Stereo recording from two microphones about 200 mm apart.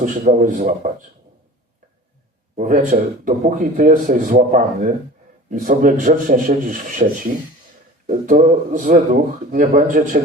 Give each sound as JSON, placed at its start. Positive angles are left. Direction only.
{"t": 0.0, "sound": "speech", "side_deg": -40}
{"t": 2.6, "sound": "speech", "side_deg": -40}